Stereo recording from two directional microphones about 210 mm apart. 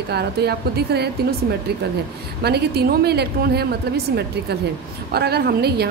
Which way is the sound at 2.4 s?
50° right (ahead or behind).